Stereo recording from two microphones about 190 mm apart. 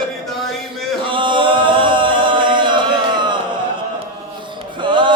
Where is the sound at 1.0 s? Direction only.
25° right (ahead or behind).